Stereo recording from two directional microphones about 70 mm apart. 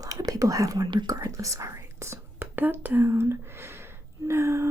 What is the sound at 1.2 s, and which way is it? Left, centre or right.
Speech, right.